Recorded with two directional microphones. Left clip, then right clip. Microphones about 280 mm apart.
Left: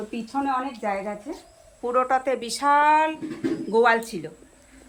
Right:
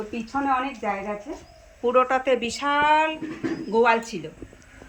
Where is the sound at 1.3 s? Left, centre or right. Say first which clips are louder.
Even; centre.